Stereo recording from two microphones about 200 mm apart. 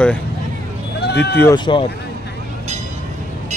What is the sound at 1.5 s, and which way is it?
Speech, 25° left (ahead or behind).